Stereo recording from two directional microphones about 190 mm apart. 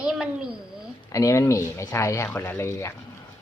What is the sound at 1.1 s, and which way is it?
Speech, 15° left (ahead or behind).